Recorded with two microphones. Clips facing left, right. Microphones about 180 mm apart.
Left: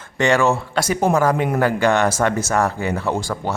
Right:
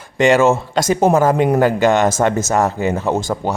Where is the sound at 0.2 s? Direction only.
20° right (ahead or behind).